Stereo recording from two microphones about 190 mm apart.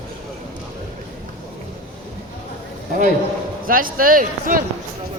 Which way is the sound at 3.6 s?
45° right (ahead or behind).